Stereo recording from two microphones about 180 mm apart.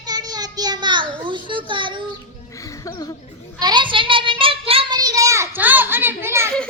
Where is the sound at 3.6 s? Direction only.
25° right (ahead or behind).